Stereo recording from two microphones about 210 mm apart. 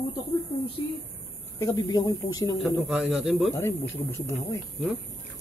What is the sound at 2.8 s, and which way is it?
Speech, centre (ahead or behind).